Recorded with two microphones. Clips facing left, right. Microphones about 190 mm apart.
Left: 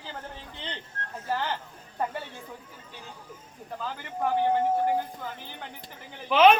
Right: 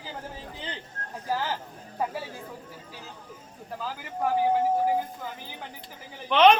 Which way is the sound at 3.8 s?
5° right (ahead or behind).